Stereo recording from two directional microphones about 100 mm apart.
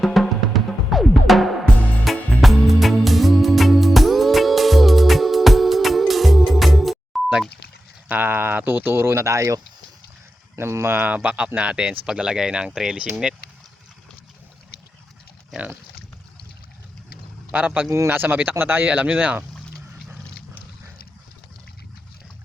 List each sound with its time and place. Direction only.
0.0 s music: centre (ahead or behind)
8.0 s a sound: 20° right (ahead or behind)
10.5 s speech: 30° right (ahead or behind)
11.0 s speech: 15° right (ahead or behind)
17.5 s speech: 15° right (ahead or behind)
17.8 s speech: 30° right (ahead or behind)
18.9 s speech: 10° right (ahead or behind)